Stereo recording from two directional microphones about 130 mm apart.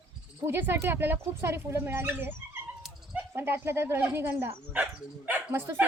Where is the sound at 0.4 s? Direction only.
20° right (ahead or behind).